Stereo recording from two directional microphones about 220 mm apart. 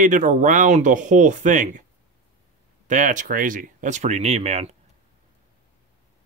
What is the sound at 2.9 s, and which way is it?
Speech, 35° right (ahead or behind).